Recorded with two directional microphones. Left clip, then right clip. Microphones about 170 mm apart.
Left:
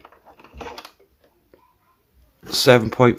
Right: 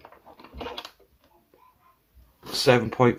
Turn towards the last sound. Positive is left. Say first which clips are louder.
# left 6 dB
turn(degrees=40)  # may be behind; listen again after turning